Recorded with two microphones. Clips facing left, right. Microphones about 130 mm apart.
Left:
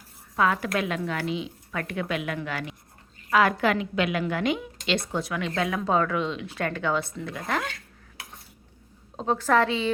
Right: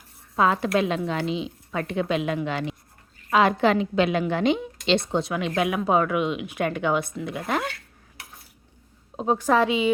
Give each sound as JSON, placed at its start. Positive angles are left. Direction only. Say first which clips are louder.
{"t": 0.3, "sound": "a woman's voice", "louder": "right 3 dB", "side_deg": -25}
{"t": 9.1, "sound": "speech", "louder": "right 2 dB", "side_deg": -15}